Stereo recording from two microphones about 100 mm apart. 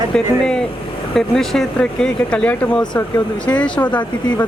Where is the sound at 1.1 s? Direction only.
5° left (ahead or behind).